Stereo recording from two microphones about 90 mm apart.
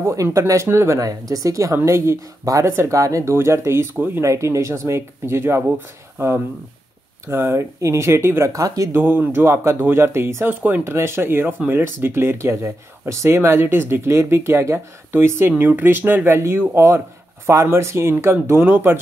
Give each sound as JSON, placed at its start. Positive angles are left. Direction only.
{"t": 0.0, "sound": "speech", "side_deg": -35}
{"t": 4.2, "sound": "speech", "side_deg": -35}
{"t": 8.9, "sound": "speech", "side_deg": -20}